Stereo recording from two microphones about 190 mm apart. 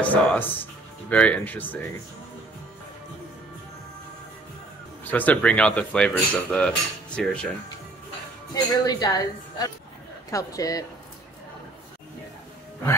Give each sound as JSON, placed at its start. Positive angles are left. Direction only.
{"t": 0.0, "sound": "speech", "side_deg": 10}
{"t": 5.0, "sound": "speech", "side_deg": 10}
{"t": 8.7, "sound": "speech", "side_deg": 20}